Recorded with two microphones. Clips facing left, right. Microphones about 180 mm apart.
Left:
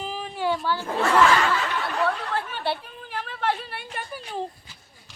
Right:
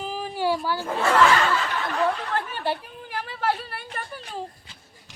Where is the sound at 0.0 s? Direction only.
5° right (ahead or behind).